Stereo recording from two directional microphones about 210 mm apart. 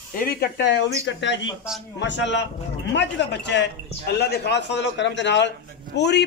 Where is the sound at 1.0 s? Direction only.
55° left (ahead or behind).